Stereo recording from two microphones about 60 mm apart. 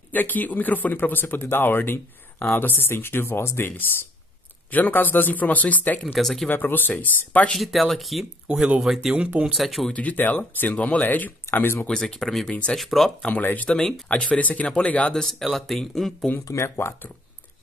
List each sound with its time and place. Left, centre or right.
0.1 s speech: left
4.6 s speech: left
6.1 s speech: centre
6.5 s speech: left
7.5 s speech: centre
9.9 s speech: left
11.9 s speech: centre
12.4 s speech: centre
12.7 s speech: centre
13.3 s speech: left
13.7 s speech: centre
15.1 s speech: centre
16.6 s speech: left